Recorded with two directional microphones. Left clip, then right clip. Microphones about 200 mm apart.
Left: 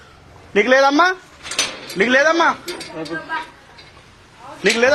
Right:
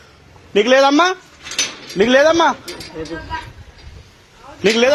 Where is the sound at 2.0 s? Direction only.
35° right (ahead or behind).